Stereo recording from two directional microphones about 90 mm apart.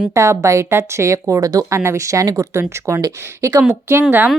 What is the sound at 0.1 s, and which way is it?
Speech, 35° right (ahead or behind).